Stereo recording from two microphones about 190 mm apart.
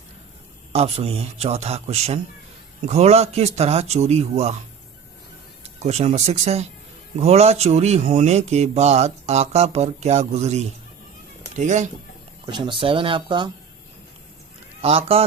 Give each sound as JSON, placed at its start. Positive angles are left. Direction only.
{"t": 0.7, "sound": "speech", "side_deg": -30}
{"t": 5.6, "sound": "speech", "side_deg": -35}
{"t": 12.5, "sound": "speech", "side_deg": -25}
{"t": 14.8, "sound": "speech", "side_deg": -30}